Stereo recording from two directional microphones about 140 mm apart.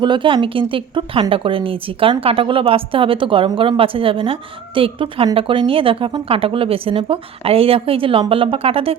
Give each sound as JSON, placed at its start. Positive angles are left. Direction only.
{"t": 0.0, "sound": "a woman's voice", "side_deg": -35}